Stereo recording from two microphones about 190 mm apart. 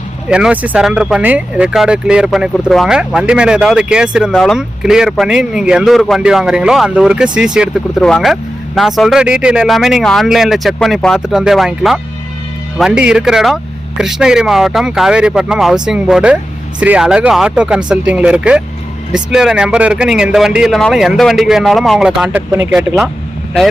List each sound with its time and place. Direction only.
0.3 s speech: 5° right (ahead or behind)